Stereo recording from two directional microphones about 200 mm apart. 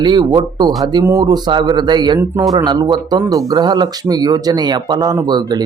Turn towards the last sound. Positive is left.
turn(degrees=-20)  # may be behind; listen again after turning